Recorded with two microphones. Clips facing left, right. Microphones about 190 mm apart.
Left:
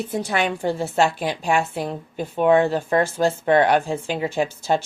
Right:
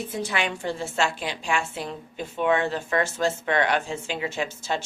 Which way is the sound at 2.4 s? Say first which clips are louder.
Left 7 dB; 35° left (ahead or behind).